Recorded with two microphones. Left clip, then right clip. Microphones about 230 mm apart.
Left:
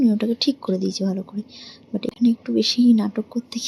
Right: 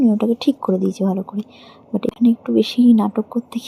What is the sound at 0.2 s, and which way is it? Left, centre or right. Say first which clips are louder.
Speech: right 4 dB; centre.